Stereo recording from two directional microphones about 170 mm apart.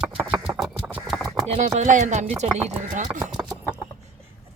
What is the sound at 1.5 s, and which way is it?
Speech, 40° right (ahead or behind).